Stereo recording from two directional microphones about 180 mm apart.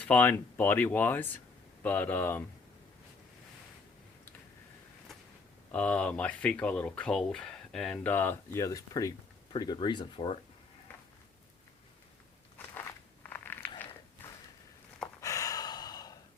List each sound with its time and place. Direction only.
0.0 s speech: 10° left (ahead or behind)
5.7 s speech: 5° left (ahead or behind); by 10.3 s 25° left (ahead or behind)
12.5 s a sound: 10° left (ahead or behind)
15.2 s gasp: 20° left (ahead or behind)